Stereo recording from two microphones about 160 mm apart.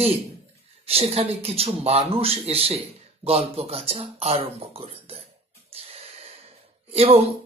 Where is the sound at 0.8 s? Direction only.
40° right (ahead or behind).